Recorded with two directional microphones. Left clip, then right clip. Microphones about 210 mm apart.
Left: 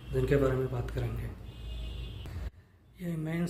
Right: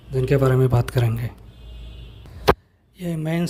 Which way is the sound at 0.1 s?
40° right (ahead or behind).